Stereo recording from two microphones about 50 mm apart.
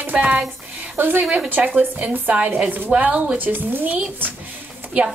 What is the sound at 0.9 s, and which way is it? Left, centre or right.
A woman's voice, right.